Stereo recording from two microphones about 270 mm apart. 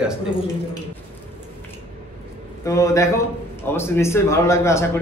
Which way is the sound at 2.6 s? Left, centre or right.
Centre.